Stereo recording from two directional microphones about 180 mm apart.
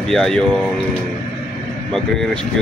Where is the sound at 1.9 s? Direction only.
5° left (ahead or behind).